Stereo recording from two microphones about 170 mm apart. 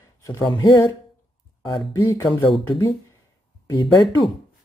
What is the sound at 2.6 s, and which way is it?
Speech, 25° left (ahead or behind).